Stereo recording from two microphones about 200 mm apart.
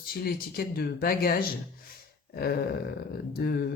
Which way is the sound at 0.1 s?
50° left (ahead or behind).